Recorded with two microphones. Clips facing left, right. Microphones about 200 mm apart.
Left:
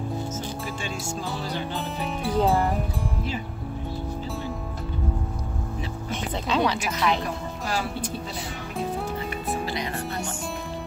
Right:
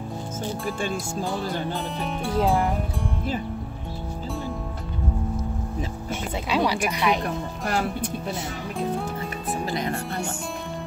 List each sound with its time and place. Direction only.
1.7 s speech: centre (ahead or behind)
6.0 s a sound: 10° right (ahead or behind)
6.9 s speech: 15° right (ahead or behind)
7.6 s speech: 60° right (ahead or behind)
9.7 s music: 50° right (ahead or behind)